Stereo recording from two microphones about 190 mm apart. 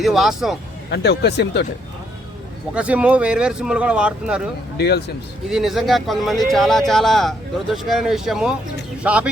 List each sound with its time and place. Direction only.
0.0 s speech: centre (ahead or behind)
0.9 s speech: 60° left (ahead or behind)
2.7 s speech: 5° right (ahead or behind)
4.8 s speech: 60° left (ahead or behind)
5.5 s speech: centre (ahead or behind)